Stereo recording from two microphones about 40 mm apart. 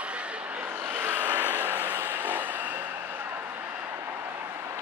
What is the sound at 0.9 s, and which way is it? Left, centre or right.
Vehicle, right.